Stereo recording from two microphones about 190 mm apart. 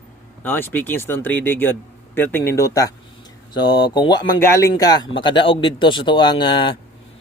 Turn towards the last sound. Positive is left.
turn(degrees=25)  # may be behind; listen again after turning